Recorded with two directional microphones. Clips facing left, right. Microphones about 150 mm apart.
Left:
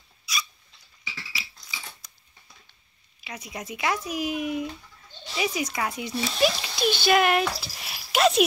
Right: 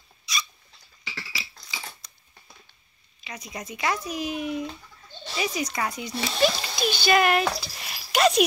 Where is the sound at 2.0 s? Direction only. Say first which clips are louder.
Right 1 dB; 5° left (ahead or behind).